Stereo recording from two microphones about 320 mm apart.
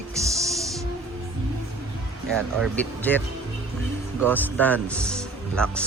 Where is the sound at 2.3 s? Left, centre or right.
Centre.